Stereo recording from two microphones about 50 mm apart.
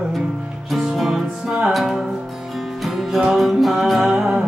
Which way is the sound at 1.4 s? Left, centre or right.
Centre.